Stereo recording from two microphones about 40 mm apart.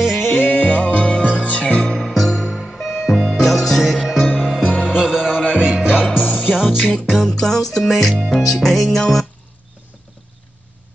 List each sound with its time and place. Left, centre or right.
0.3 s music: left
1.8 s music: centre
4.4 s music: centre
4.8 s music: centre
5.5 s music: right
6.3 s music: centre
7.2 s music: centre
8.1 s music: centre
8.4 s music: centre